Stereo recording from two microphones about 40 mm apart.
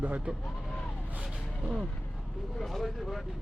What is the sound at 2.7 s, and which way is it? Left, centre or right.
Vehicle, centre.